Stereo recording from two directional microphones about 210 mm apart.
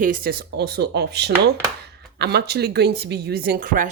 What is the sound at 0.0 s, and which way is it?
Speech, 40° right (ahead or behind).